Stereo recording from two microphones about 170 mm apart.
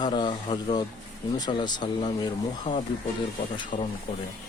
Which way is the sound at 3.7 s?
50° left (ahead or behind).